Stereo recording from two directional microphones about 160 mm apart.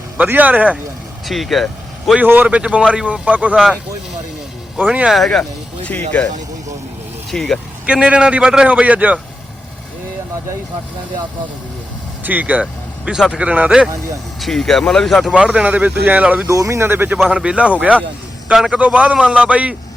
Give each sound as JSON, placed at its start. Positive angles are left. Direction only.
{"t": 0.2, "sound": "a man's voice", "side_deg": -10}
{"t": 2.2, "sound": "a man's voice", "side_deg": -10}
{"t": 4.8, "sound": "speech", "side_deg": -10}
{"t": 7.3, "sound": "a man's voice", "side_deg": 0}
{"t": 12.2, "sound": "a man's voice", "side_deg": -10}
{"t": 16.5, "sound": "a man's voice", "side_deg": -20}